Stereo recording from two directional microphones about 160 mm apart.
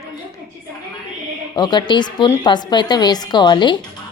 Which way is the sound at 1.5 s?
25° left (ahead or behind).